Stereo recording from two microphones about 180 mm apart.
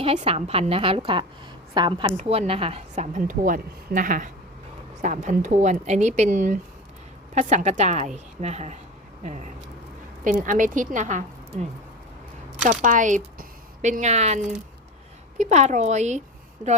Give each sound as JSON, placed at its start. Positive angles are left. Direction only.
{"t": 0.0, "sound": "a woman's voice", "side_deg": -35}
{"t": 12.8, "sound": "a woman's voice", "side_deg": -45}